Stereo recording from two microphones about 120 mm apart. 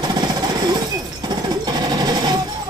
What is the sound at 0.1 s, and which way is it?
Jackhammer, 35° right (ahead or behind).